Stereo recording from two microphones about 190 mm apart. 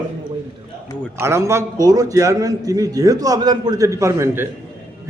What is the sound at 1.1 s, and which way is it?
A man's voice, 15° right (ahead or behind).